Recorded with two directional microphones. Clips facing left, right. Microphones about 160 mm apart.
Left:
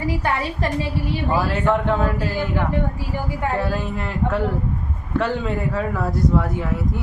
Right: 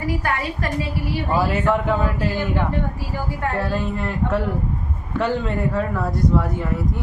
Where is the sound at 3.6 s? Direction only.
Centre (ahead or behind).